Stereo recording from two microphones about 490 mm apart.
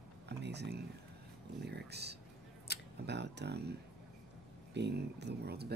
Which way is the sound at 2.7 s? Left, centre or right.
Centre.